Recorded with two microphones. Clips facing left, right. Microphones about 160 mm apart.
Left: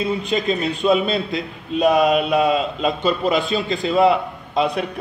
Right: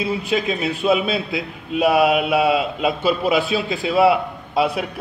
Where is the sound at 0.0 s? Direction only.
5° right (ahead or behind).